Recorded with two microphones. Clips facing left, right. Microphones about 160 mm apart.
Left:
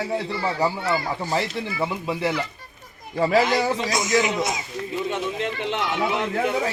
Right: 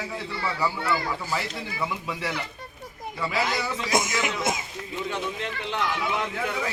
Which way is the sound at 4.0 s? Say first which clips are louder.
Left 6 dB; 50° right (ahead or behind).